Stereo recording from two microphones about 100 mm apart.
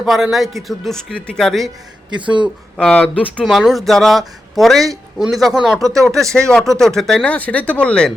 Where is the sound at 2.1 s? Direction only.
55° right (ahead or behind).